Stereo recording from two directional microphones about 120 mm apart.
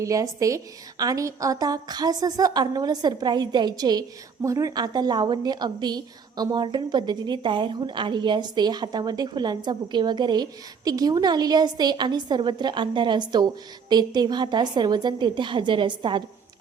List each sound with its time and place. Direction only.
0.0 s a woman's voice: 25° right (ahead or behind); by 16.2 s 40° right (ahead or behind)